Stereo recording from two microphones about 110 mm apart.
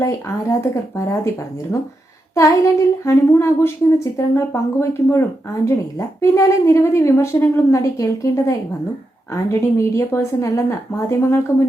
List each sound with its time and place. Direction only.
0.0 s speech: 25° left (ahead or behind)
2.3 s speech: 30° left (ahead or behind)